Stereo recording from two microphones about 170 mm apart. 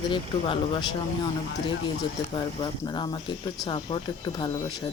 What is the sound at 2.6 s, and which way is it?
Speech, 25° left (ahead or behind).